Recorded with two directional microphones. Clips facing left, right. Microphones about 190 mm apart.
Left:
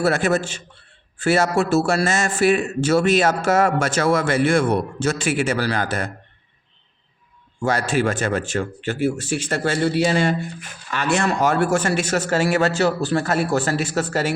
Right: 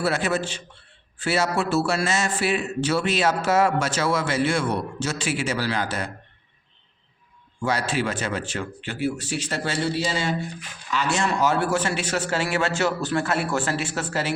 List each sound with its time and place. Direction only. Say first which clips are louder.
0.0 s speech: left 5 dB; 45° left (ahead or behind)
7.6 s speech: left 4 dB; 45° left (ahead or behind)